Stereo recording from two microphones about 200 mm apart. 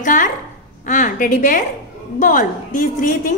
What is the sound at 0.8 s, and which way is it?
A woman's voice, 40° left (ahead or behind).